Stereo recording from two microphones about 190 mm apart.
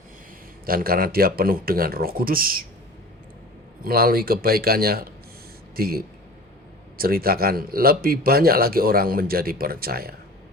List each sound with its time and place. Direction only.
0.6 s speech: 50° right (ahead or behind)
3.8 s speech: 50° right (ahead or behind)